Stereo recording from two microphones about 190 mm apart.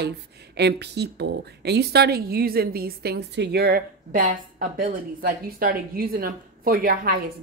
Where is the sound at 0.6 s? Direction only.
60° right (ahead or behind).